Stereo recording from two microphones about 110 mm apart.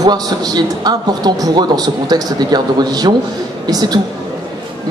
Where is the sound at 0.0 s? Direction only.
40° right (ahead or behind).